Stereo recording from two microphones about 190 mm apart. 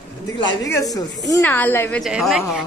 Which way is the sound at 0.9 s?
20° left (ahead or behind).